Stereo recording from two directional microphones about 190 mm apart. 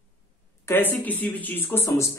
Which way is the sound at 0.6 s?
10° left (ahead or behind).